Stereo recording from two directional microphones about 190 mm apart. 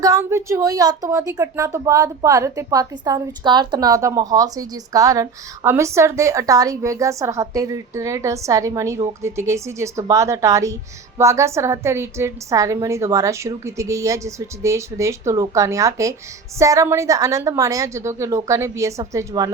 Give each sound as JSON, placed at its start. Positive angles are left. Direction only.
{"t": 0.0, "sound": "speech", "side_deg": -15}